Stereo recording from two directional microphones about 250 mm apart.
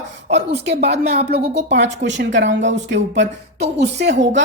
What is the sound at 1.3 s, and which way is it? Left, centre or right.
A woman's voice, right.